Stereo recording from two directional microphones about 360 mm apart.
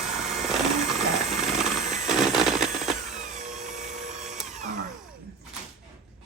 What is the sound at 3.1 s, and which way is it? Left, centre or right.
Power windows, centre.